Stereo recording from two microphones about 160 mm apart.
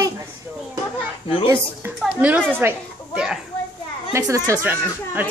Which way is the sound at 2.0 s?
10° right (ahead or behind).